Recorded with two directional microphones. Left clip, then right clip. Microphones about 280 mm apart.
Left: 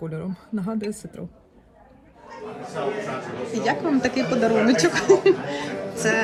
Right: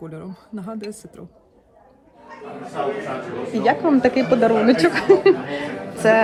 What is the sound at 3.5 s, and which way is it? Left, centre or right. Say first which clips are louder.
A woman's voice: right 5 dB; centre.